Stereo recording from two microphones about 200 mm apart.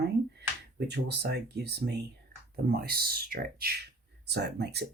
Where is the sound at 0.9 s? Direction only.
55° right (ahead or behind).